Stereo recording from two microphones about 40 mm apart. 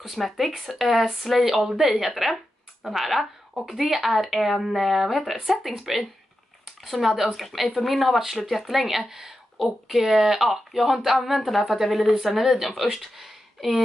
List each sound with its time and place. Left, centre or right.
0.0 s speech: centre